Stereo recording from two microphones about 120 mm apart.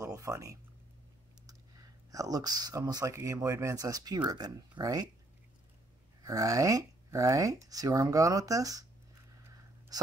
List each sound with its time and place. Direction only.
0.0 s a sound: 25° right (ahead or behind)
2.0 s speech: 30° right (ahead or behind)
6.2 s speech: 30° right (ahead or behind)